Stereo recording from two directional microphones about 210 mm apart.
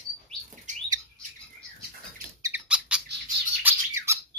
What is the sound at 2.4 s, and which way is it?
Squeak, 15° right (ahead or behind).